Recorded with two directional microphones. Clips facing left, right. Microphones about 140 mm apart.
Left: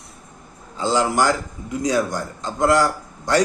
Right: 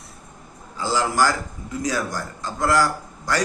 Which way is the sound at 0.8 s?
20° left (ahead or behind).